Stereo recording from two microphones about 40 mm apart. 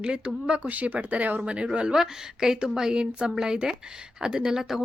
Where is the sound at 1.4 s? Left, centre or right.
Right.